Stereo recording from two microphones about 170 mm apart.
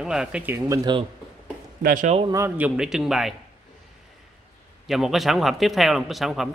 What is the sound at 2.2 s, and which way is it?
Speech, 20° right (ahead or behind).